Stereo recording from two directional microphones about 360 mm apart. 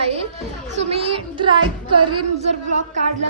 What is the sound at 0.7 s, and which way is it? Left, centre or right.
Child singing, centre.